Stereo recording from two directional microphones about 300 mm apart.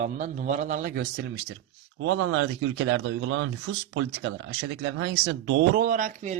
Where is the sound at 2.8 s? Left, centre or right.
Right.